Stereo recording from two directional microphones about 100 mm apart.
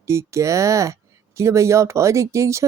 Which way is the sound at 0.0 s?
30° right (ahead or behind).